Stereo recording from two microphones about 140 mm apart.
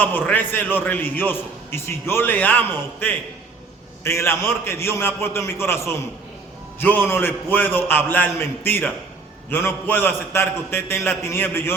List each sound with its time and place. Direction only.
0.0 s a man's voice: 10° left (ahead or behind)
4.0 s a man's voice: 20° left (ahead or behind)